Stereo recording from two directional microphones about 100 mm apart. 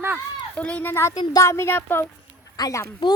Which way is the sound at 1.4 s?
25° left (ahead or behind).